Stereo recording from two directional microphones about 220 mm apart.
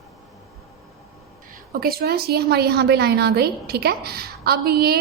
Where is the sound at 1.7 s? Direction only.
45° right (ahead or behind).